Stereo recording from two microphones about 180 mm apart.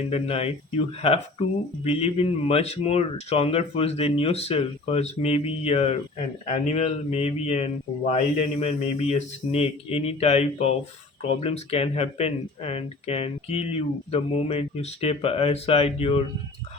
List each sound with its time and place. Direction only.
0.1 s speech: 35° left (ahead or behind)
1.8 s speech: 35° left (ahead or behind)